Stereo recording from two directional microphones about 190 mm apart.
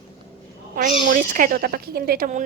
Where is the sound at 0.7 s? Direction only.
45° right (ahead or behind).